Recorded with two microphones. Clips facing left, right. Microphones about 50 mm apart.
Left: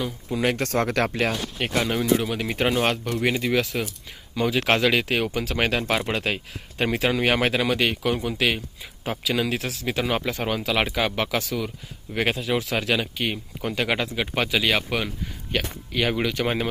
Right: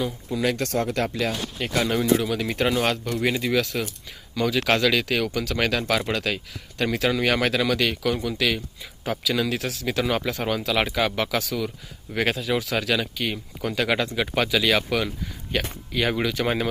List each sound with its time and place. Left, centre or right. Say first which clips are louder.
0.3 s speech: left 1 dB; left
0.9 s speech: left 2 dB; left
1.7 s speech: right 1 dB; centre
2.3 s speech: even; centre